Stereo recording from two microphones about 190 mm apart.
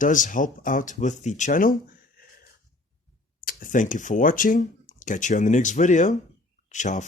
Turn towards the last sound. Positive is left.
turn(degrees=40)  # may be behind; listen again after turning